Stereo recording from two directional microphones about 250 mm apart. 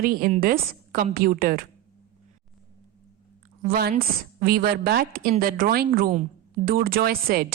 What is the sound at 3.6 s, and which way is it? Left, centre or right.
Speech, right.